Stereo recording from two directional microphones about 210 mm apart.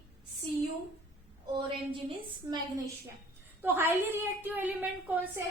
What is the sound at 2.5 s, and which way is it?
A woman's voice, 15° right (ahead or behind).